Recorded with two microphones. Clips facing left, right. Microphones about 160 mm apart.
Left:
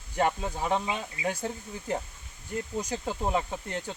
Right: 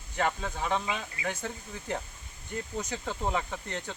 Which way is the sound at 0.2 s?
15° left (ahead or behind).